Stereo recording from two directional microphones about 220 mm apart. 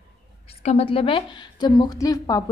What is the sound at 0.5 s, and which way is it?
A woman's voice, 30° left (ahead or behind).